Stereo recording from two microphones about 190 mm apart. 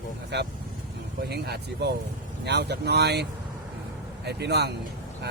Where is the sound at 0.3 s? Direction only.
60° right (ahead or behind).